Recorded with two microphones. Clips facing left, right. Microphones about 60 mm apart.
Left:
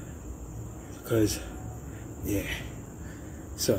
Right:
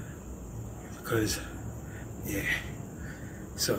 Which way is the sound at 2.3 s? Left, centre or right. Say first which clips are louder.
Left 1 dB; right.